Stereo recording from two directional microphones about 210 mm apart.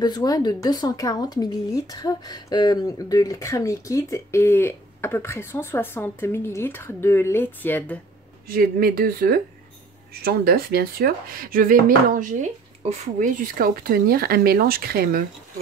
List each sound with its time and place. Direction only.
0.0 s speech: 20° left (ahead or behind)
8.5 s speech: 45° right (ahead or behind)